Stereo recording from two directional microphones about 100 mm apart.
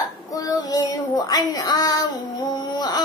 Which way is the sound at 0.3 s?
35° left (ahead or behind).